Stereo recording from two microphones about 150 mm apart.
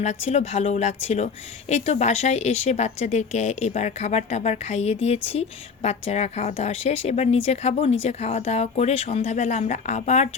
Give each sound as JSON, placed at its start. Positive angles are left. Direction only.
{"t": 0.0, "sound": "speech", "side_deg": 50}